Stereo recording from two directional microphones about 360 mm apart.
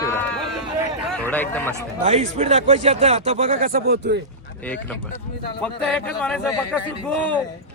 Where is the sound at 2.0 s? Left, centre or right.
Centre.